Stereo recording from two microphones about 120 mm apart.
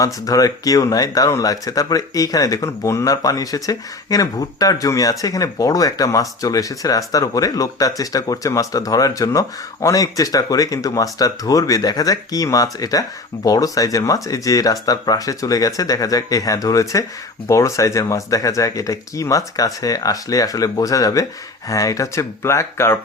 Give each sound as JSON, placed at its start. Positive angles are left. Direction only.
{"t": 0.0, "sound": "speech", "side_deg": 30}